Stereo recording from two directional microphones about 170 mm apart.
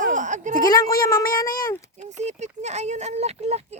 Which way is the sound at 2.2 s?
40° right (ahead or behind).